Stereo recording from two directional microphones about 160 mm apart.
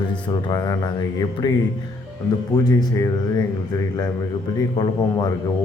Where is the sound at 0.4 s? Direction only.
25° left (ahead or behind).